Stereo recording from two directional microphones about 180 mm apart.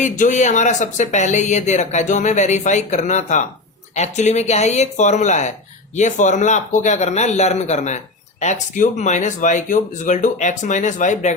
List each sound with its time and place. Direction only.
0.0 s a man's voice: 45° left (ahead or behind)